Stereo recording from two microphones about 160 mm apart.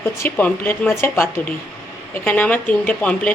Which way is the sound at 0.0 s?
15° left (ahead or behind).